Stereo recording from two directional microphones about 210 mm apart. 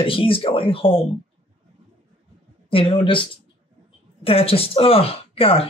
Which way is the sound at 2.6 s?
25° left (ahead or behind).